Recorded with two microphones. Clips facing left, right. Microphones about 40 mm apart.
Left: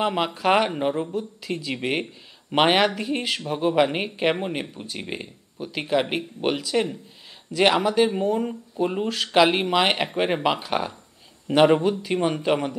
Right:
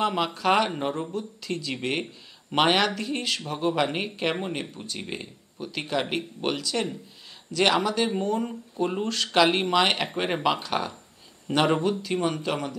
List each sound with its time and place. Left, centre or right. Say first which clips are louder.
0.0 s speech: left 2 dB; centre